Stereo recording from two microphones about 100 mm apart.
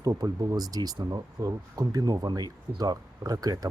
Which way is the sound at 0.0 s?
40° right (ahead or behind).